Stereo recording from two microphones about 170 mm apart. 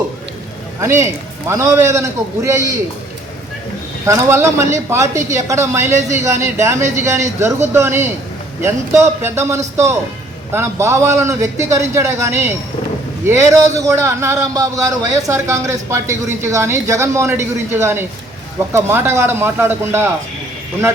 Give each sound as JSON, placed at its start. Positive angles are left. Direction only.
{"t": 0.8, "sound": "a man's voice", "side_deg": -15}
{"t": 4.0, "sound": "a man's voice", "side_deg": -15}